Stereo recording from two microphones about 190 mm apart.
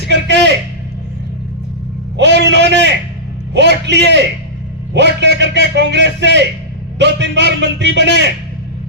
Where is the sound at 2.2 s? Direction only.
65° right (ahead or behind).